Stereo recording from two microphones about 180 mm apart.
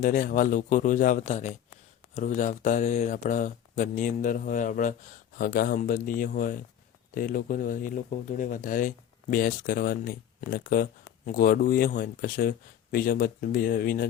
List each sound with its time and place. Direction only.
0.0 s speech: 50° left (ahead or behind)